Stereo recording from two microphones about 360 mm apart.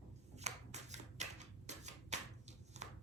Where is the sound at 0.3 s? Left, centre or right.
Centre.